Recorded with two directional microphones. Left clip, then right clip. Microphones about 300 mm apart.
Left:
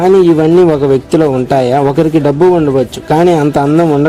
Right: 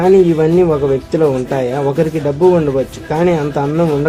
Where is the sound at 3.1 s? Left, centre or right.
Left.